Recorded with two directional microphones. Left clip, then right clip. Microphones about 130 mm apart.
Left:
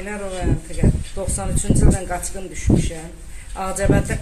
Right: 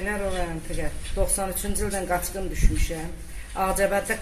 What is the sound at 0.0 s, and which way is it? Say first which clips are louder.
A woman's voice: left 1 dB; 5° right (ahead or behind).